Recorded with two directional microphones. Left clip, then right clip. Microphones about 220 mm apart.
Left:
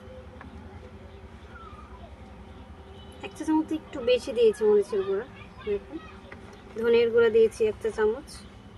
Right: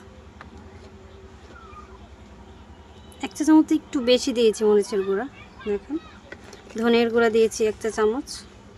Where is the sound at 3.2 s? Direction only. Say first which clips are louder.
Right 9 dB; 50° right (ahead or behind).